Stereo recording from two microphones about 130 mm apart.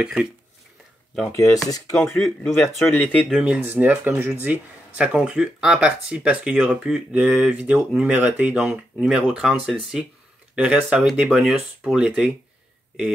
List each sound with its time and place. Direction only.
0.0 s speech: 10° right (ahead or behind)
1.3 s speech: 25° left (ahead or behind)
2.1 s speech: 5° left (ahead or behind)
2.6 s speech: 15° left (ahead or behind)
3.3 s speech: 5° right (ahead or behind)